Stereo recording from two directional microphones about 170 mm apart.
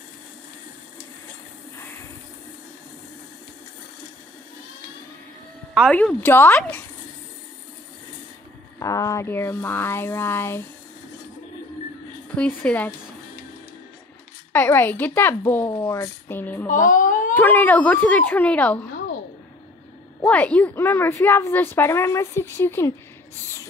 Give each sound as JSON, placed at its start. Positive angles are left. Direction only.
{"t": 5.9, "sound": "a woman's voice", "side_deg": 10}
{"t": 8.7, "sound": "a woman's voice", "side_deg": 20}
{"t": 12.4, "sound": "a woman's voice", "side_deg": 5}
{"t": 14.5, "sound": "a woman's voice", "side_deg": 10}
{"t": 16.6, "sound": "speech", "side_deg": 50}
{"t": 17.3, "sound": "a woman's voice", "side_deg": 10}
{"t": 20.2, "sound": "a woman's voice", "side_deg": 10}